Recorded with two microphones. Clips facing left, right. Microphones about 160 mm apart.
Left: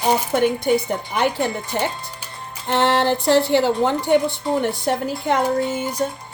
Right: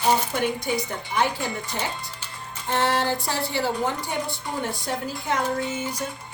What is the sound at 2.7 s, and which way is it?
A woman's voice, 70° left (ahead or behind).